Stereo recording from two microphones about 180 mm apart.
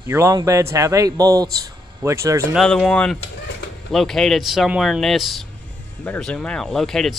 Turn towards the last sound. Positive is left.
turn(degrees=0)  # may be behind; listen again after turning